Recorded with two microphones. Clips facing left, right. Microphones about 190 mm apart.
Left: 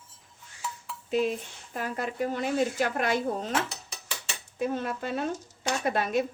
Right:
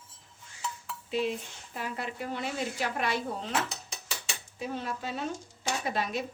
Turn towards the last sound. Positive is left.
turn(degrees=55)  # may be behind; listen again after turning